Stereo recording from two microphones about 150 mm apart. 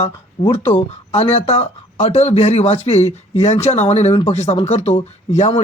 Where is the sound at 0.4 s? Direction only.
45° left (ahead or behind).